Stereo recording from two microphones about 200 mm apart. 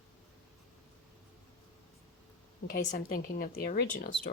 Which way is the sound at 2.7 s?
45° left (ahead or behind).